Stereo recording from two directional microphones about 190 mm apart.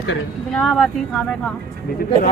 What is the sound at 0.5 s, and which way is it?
Speech, centre (ahead or behind).